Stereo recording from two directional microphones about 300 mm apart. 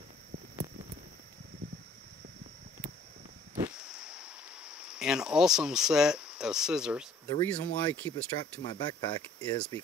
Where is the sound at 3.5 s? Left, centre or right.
Centre.